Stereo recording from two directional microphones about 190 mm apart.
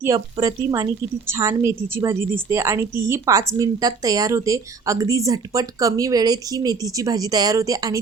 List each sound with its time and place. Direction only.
0.0 s a woman's voice: 20° right (ahead or behind)